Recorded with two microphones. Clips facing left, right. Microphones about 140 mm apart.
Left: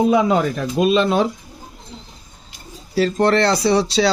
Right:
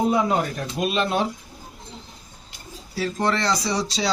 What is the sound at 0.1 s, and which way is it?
Speech, 90° left.